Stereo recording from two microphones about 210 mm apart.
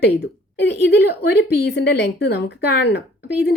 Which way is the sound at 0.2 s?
55° left (ahead or behind).